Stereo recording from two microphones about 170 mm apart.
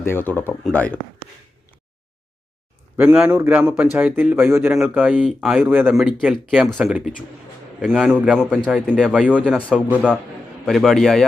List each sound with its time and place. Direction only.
0.0 s speech: 10° left (ahead or behind)
3.0 s a man's voice: 10° right (ahead or behind)
5.6 s a man's voice: 10° right (ahead or behind)
5.9 s speech: centre (ahead or behind)
9.0 s a man's voice: 5° right (ahead or behind)